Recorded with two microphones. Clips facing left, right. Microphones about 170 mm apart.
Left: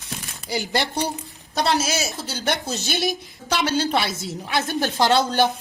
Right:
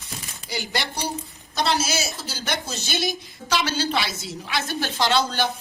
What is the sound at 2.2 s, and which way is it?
A woman's voice, 60° left (ahead or behind).